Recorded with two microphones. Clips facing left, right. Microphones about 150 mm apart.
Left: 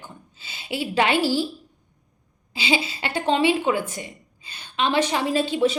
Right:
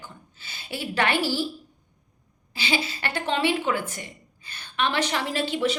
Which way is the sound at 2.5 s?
20° left (ahead or behind).